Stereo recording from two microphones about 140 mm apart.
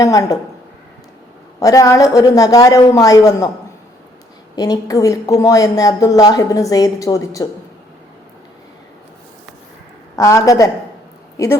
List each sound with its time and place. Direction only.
0.0 s a woman's voice: 25° left (ahead or behind)
1.5 s a woman's voice: 25° left (ahead or behind)
4.5 s a woman's voice: 25° left (ahead or behind)
10.2 s a woman's voice: 25° left (ahead or behind)